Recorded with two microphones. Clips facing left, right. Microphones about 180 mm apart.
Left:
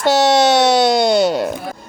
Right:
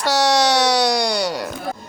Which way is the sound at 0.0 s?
20° left (ahead or behind).